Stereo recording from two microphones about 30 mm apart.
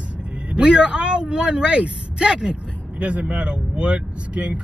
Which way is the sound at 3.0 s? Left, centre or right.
Right.